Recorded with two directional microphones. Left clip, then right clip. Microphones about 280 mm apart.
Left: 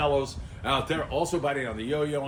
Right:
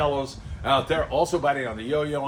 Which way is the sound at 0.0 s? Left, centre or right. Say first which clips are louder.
Right 1 dB; centre.